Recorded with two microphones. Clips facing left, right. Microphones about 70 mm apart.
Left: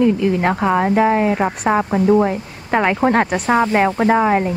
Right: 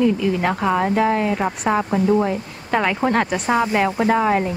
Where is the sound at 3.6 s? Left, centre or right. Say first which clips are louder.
Left 3 dB; left.